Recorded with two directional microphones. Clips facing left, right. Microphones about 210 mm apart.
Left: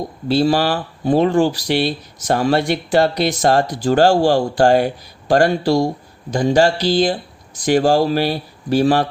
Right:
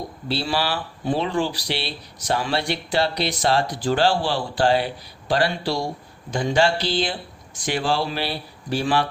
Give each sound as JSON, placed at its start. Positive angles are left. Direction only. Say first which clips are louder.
{"t": 0.3, "sound": "speech", "louder": "left 9 dB", "side_deg": 45}